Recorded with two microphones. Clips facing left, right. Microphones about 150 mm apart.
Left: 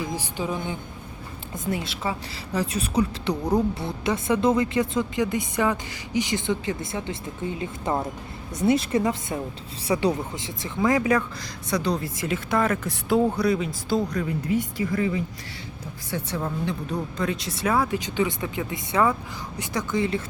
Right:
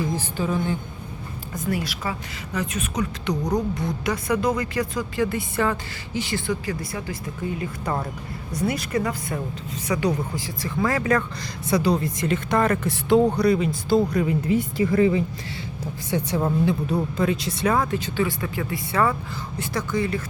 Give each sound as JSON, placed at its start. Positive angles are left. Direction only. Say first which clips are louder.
{"t": 0.0, "sound": "a woman's voice", "louder": "right 3 dB", "side_deg": 15}
{"t": 11.7, "sound": "speech", "louder": "right 4 dB", "side_deg": -5}
{"t": 14.5, "sound": "speech", "louder": "right 2 dB", "side_deg": -30}
{"t": 16.0, "sound": "a woman's voice", "louder": "right 5 dB", "side_deg": -20}
{"t": 16.6, "sound": "a woman's voice", "louder": "right 5 dB", "side_deg": -5}